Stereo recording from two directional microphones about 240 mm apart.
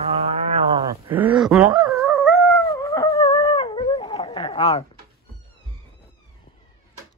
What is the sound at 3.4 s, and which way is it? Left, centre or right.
Dog, left.